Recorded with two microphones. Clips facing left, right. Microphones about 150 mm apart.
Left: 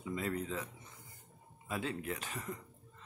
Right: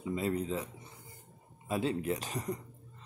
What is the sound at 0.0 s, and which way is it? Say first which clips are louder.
Speech: right 5 dB; 25° right (ahead or behind).